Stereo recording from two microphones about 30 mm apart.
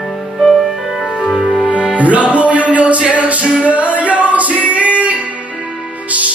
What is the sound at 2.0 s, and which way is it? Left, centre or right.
Music, right.